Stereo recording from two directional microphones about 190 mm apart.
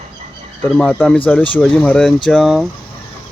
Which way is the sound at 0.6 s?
5° left (ahead or behind).